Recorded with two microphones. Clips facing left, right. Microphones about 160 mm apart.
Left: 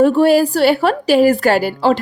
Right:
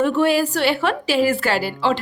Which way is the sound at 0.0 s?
40° left (ahead or behind).